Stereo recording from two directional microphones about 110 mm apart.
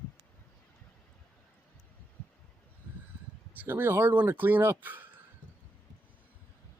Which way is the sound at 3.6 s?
20° right (ahead or behind).